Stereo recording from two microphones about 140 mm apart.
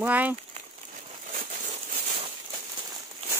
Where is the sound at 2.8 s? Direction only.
25° right (ahead or behind).